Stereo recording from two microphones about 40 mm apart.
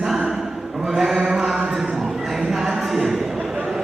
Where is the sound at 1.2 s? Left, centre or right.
Centre.